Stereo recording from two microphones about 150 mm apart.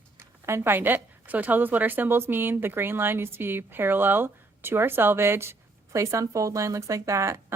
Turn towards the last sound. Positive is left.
turn(degrees=-20)  # may be behind; listen again after turning